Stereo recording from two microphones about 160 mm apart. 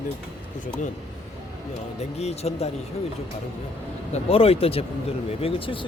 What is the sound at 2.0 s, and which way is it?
Speech, 40° left (ahead or behind).